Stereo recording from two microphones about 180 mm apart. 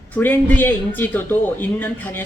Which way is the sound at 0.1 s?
10° left (ahead or behind).